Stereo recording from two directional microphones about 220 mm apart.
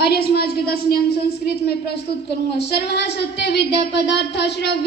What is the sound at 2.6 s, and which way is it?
Child singing, 50° left (ahead or behind).